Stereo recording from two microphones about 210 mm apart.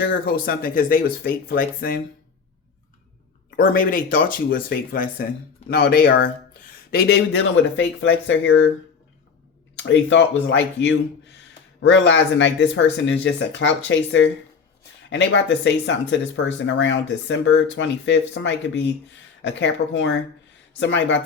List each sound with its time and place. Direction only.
0.0 s speech: 45° left (ahead or behind)
3.5 s speech: 45° left (ahead or behind); by 8.6 s 65° left (ahead or behind)
9.7 s speech: 60° left (ahead or behind)